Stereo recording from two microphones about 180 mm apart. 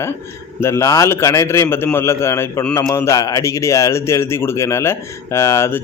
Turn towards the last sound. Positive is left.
turn(degrees=15)  # may be behind; listen again after turning